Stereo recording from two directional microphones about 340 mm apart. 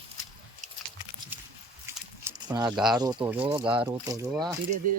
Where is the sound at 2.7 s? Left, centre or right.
Centre.